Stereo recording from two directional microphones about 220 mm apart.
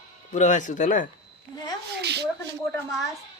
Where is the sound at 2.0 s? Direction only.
50° right (ahead or behind).